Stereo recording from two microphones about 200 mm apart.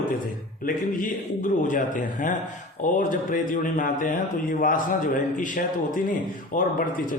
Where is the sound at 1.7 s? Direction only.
40° left (ahead or behind).